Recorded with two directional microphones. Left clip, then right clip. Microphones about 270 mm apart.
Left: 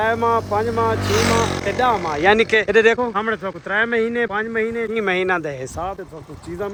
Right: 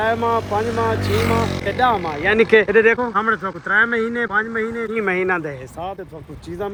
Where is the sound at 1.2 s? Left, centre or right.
Left.